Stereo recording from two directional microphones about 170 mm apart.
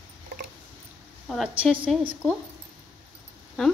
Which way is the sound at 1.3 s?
Centre (ahead or behind).